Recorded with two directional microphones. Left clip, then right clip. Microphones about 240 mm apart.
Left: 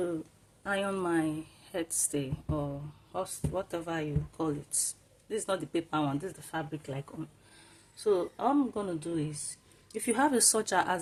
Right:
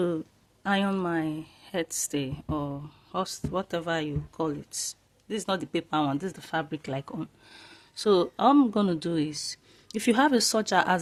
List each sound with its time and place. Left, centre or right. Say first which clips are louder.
0.6 s speech: right 4 dB; right